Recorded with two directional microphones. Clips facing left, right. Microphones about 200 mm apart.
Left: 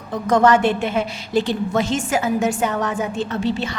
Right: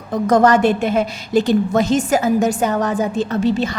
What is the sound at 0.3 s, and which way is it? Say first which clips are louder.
A woman's voice: right 2 dB; 40° right (ahead or behind).